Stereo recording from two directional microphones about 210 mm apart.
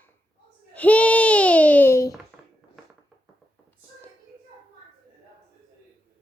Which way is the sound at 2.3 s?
Centre (ahead or behind).